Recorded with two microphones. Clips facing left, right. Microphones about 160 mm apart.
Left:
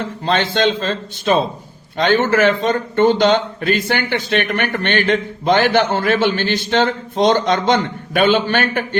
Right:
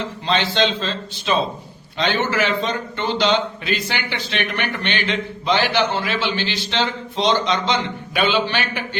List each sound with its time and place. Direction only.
0.0 s a man's voice: 50° left (ahead or behind)